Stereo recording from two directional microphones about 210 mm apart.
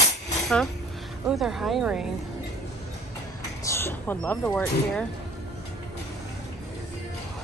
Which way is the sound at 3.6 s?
10° left (ahead or behind).